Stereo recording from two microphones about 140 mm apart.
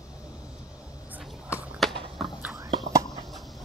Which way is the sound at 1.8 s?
Centre (ahead or behind).